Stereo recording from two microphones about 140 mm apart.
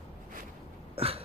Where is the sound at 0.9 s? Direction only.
45° right (ahead or behind).